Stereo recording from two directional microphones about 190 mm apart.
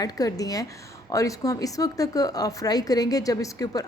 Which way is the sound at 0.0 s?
20° left (ahead or behind).